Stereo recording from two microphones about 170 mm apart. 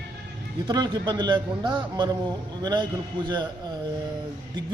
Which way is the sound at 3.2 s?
25° right (ahead or behind).